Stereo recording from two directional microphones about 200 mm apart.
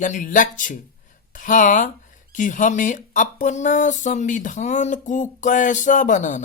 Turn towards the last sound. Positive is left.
turn(degrees=40)  # may be behind; listen again after turning